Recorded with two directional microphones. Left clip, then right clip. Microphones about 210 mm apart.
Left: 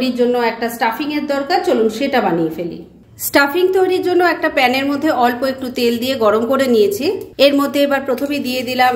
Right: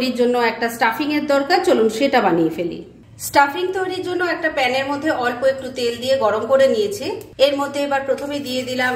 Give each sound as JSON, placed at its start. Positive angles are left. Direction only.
{"t": 0.0, "sound": "a woman's voice", "side_deg": -5}
{"t": 3.3, "sound": "a woman's voice", "side_deg": 40}